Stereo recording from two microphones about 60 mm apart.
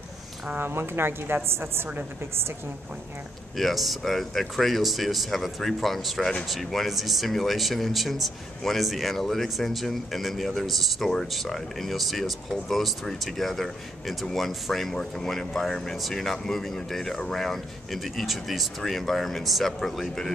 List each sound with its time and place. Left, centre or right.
0.6 s a woman's voice: right
3.5 s speech: centre